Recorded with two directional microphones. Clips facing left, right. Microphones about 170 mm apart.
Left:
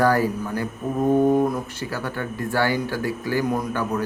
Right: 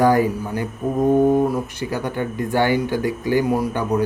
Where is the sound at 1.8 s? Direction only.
15° right (ahead or behind).